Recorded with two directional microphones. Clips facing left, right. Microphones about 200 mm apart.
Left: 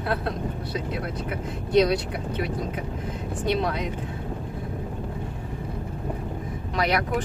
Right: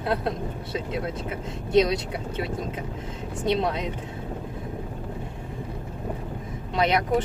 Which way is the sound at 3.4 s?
20° right (ahead or behind).